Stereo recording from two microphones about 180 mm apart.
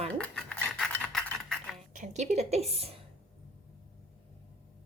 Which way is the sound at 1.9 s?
40° right (ahead or behind).